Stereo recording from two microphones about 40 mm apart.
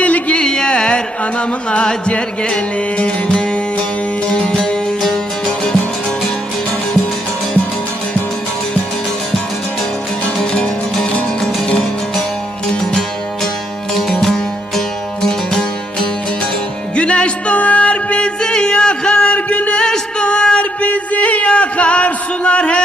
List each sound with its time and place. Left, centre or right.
0.0 s music: left
0.4 s music: centre
10.3 s music: centre
13.9 s music: centre
16.9 s music: left
19.7 s music: left
20.8 s a sound: left